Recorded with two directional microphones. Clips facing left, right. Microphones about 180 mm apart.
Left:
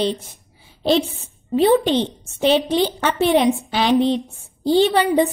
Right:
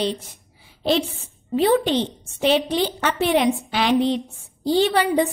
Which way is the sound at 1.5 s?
25° left (ahead or behind).